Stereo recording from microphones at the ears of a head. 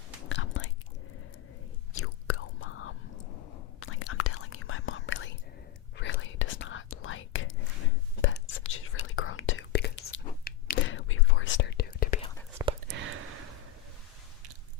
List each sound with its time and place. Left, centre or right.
0.2 s whispering: left
1.9 s whispering: left
12.5 s a sound: right